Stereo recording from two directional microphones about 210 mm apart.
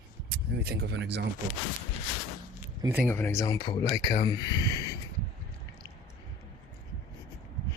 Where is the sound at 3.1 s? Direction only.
10° left (ahead or behind).